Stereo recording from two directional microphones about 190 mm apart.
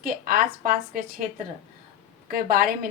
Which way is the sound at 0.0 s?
50° right (ahead or behind).